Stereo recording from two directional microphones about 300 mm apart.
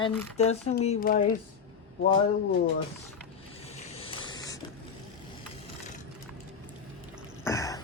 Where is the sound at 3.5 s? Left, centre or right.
Centre.